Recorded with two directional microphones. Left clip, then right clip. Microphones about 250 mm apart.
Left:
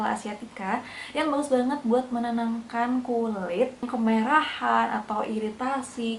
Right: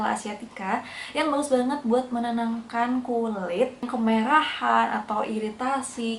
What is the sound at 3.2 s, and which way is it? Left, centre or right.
Speech, centre.